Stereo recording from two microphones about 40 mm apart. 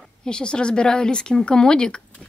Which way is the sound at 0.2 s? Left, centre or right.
Left.